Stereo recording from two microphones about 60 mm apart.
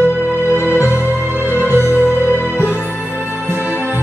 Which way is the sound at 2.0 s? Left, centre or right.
Left.